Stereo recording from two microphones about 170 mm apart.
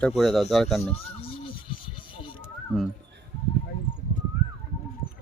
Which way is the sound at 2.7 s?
Centre (ahead or behind).